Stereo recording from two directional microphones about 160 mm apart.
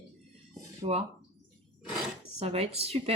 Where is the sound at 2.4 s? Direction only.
40° right (ahead or behind).